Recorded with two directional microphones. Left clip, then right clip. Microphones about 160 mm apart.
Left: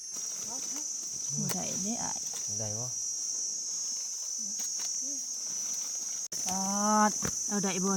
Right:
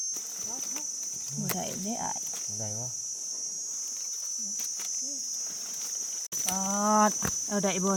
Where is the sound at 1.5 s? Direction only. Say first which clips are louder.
Right 1 dB; 35° right (ahead or behind).